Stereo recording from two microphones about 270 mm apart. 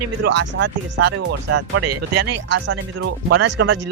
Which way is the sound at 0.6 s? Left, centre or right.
Right.